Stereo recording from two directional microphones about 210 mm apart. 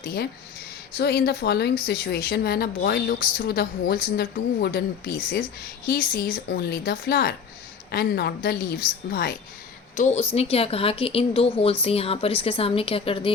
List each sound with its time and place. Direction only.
0.0 s speech: 45° left (ahead or behind)
9.9 s a woman's voice: 35° left (ahead or behind)